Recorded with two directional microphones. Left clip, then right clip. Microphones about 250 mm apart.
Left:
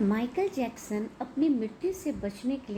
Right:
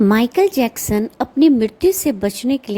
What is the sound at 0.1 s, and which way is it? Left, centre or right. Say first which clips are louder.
A woman's voice: right 15 dB; right.